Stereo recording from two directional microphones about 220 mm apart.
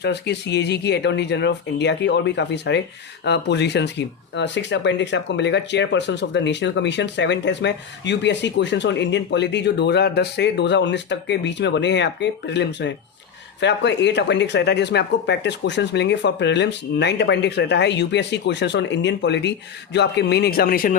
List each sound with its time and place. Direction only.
0.0 s speech: 50° left (ahead or behind)